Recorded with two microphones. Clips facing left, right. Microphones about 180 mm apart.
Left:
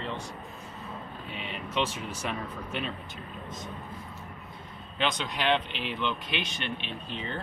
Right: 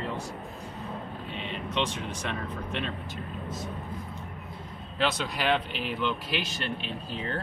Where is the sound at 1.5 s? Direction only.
5° left (ahead or behind).